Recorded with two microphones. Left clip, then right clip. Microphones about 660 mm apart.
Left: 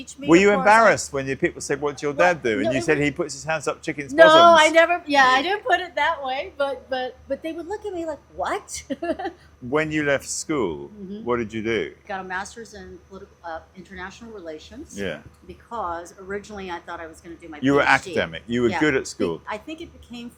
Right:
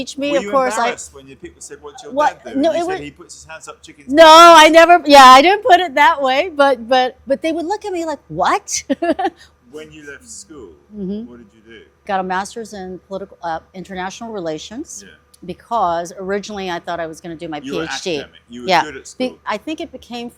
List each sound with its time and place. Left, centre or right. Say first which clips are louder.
0.3 s speech: left 1 dB; left
4.1 s a woman's voice: right 7 dB; right
9.7 s a man's voice: left 13 dB; left
12.0 s a woman's voice: right 10 dB; right
17.6 s speech: left 8 dB; left
19.2 s a woman's voice: right 5 dB; right